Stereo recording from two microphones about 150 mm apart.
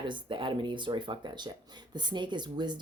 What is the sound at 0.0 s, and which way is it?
A woman's voice, 30° right (ahead or behind).